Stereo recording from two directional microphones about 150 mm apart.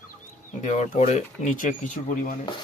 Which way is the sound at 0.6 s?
50° left (ahead or behind).